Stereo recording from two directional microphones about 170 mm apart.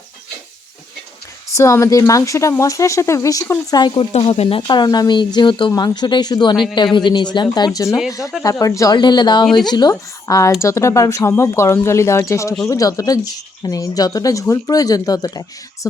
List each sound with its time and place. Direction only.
1.5 s speech: 20° left (ahead or behind)
4.1 s speech: 40° left (ahead or behind); by 15.9 s 20° left (ahead or behind)